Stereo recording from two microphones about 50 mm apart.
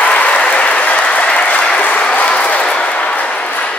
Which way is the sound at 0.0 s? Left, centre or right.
Left.